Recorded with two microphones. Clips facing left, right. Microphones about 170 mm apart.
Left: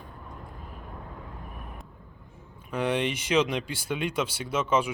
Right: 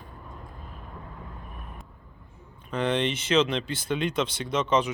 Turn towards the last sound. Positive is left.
turn(degrees=10)  # may be behind; listen again after turning